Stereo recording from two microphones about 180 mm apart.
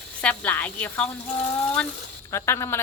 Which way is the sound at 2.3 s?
15° left (ahead or behind).